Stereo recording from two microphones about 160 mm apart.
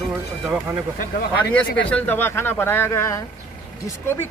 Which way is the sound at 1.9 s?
10° left (ahead or behind).